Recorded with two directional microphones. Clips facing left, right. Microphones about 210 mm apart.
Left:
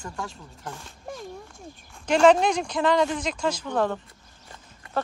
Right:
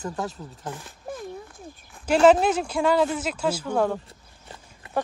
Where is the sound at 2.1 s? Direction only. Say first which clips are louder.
Right 1 dB; 5° right (ahead or behind).